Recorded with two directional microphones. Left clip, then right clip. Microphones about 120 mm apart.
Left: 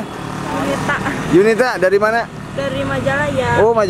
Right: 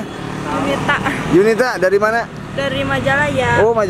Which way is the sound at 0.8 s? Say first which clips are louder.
Right 2 dB; 5° right (ahead or behind).